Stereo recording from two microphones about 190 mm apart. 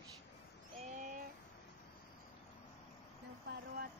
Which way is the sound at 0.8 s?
40° right (ahead or behind).